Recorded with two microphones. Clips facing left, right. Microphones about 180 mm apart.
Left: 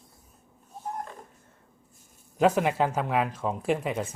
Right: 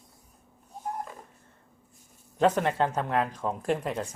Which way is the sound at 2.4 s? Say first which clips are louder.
Left 1 dB; 5° left (ahead or behind).